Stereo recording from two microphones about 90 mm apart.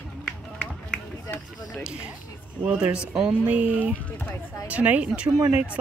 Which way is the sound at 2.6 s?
10° right (ahead or behind).